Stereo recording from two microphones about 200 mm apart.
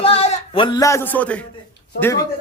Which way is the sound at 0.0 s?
30° left (ahead or behind).